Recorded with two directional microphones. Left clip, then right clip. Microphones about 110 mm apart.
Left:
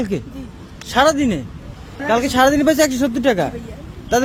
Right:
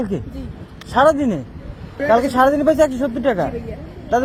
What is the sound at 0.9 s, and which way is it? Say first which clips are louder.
Speech: right 1 dB; 65° left (ahead or behind).